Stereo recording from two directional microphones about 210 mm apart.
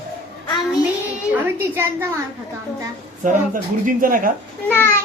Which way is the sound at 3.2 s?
40° right (ahead or behind).